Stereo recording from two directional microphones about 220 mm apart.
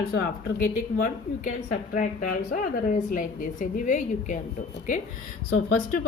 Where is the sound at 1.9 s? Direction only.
35° left (ahead or behind).